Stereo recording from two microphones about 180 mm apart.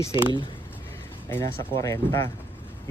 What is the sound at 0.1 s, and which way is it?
Speech, 20° right (ahead or behind).